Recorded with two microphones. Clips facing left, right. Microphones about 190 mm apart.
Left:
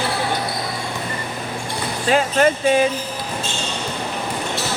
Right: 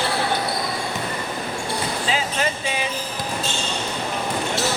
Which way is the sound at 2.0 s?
55° left (ahead or behind).